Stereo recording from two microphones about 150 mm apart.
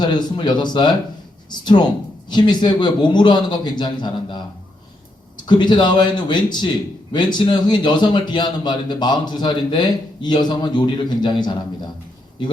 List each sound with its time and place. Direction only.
0.0 s a man's voice: 30° left (ahead or behind)
5.5 s a man's voice: 30° left (ahead or behind)